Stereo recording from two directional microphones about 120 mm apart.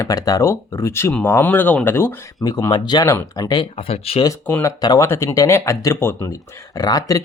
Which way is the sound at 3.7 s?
55° left (ahead or behind).